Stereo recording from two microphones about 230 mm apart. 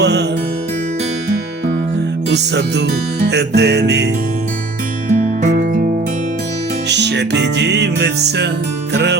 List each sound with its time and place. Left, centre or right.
0.0 s music: right
2.3 s music: right
5.1 s music: right
6.8 s music: right